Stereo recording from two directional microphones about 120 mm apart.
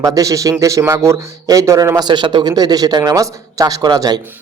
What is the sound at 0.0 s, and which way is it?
A man's voice, 25° right (ahead or behind).